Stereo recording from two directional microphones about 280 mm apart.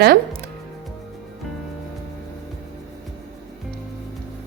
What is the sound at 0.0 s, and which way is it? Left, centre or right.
Music, right.